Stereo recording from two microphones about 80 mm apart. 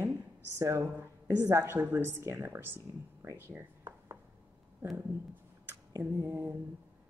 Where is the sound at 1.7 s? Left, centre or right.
Right.